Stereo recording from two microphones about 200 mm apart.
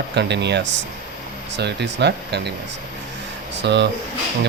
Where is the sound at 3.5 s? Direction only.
60° right (ahead or behind).